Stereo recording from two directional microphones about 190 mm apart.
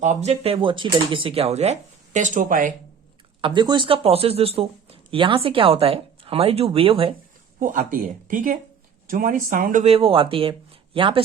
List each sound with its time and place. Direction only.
0.0 s speech: 35° right (ahead or behind)
3.4 s speech: 25° right (ahead or behind)
7.6 s speech: 45° right (ahead or behind)
9.9 s speech: 30° right (ahead or behind)